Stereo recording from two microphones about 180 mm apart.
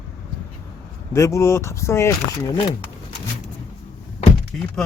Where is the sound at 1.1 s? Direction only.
15° left (ahead or behind).